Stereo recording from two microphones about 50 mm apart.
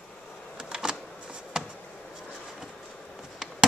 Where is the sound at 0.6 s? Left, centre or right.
Centre.